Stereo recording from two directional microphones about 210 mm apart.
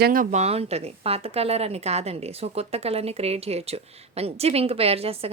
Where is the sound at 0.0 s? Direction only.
40° right (ahead or behind).